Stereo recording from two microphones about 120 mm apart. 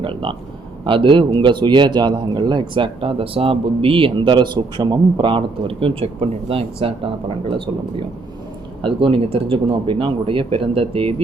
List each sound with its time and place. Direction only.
0.0 s a man's voice: 45° right (ahead or behind)